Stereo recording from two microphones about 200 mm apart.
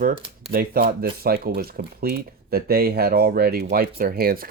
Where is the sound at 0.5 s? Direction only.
50° right (ahead or behind).